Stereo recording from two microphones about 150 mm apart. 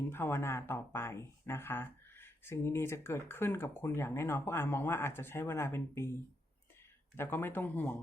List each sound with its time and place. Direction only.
0.1 s speech: 15° left (ahead or behind)
7.2 s speech: 15° left (ahead or behind)